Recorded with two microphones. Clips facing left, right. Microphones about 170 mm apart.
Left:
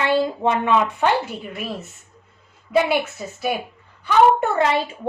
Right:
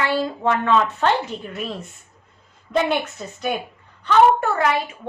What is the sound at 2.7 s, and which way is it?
Speech, 5° left (ahead or behind).